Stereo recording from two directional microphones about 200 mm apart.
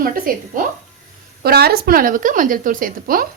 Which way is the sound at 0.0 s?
45° right (ahead or behind).